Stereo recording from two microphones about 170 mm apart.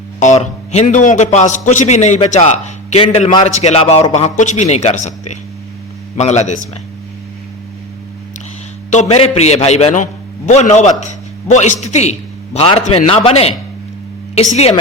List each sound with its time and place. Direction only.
0.2 s a man's voice: 45° left (ahead or behind)
8.9 s a man's voice: 40° left (ahead or behind)